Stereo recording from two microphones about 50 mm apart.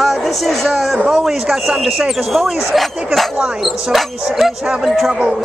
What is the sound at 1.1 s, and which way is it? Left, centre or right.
Speech, centre.